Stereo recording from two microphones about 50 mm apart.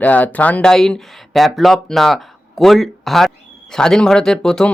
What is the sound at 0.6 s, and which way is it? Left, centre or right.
Speech, centre.